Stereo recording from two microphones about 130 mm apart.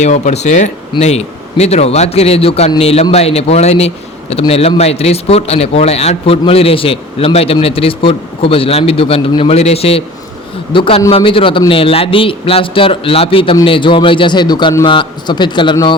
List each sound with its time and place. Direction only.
0.0 s speech: 65° left (ahead or behind); by 16.0 s 35° left (ahead or behind)